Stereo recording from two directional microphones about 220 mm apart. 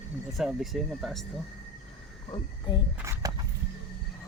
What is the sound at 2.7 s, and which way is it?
Speech, 20° left (ahead or behind).